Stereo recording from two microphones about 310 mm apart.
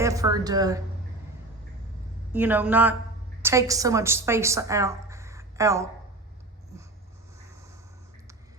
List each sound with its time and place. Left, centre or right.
0.0 s a woman's voice: centre
2.3 s a woman's voice: centre